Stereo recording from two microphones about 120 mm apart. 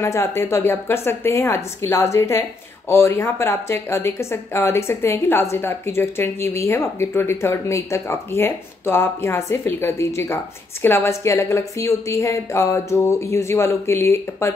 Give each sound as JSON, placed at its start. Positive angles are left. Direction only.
{"t": 0.0, "sound": "a woman's voice", "side_deg": 25}